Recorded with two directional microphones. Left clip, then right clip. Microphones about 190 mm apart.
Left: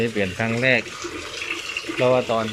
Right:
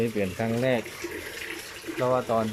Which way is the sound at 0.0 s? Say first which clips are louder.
Left 5 dB; 5° right (ahead or behind).